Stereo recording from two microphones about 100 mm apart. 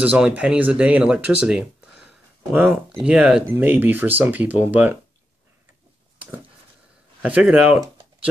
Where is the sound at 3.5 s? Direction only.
20° right (ahead or behind).